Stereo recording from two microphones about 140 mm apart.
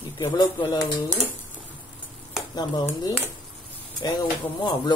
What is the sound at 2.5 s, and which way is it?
Speech, 30° left (ahead or behind).